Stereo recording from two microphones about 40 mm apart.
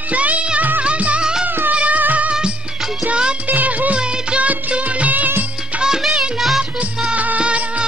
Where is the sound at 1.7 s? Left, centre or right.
Right.